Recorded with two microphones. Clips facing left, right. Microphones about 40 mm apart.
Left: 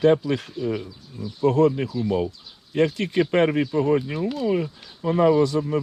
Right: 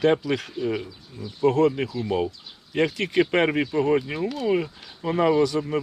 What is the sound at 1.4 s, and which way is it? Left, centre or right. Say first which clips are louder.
A man's voice: left 1 dB; right.